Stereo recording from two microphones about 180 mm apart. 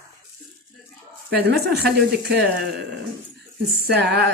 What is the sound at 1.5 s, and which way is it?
Speech, 60° right (ahead or behind).